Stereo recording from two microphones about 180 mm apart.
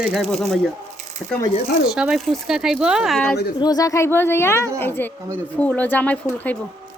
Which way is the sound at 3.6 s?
20° left (ahead or behind).